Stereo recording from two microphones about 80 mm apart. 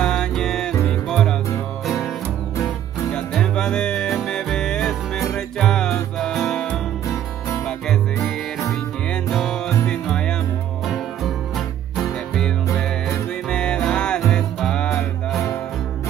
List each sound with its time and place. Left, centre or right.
0.0 s music: centre
3.3 s music: centre
9.8 s music: centre
10.9 s music: centre
12.6 s music: left
13.5 s music: centre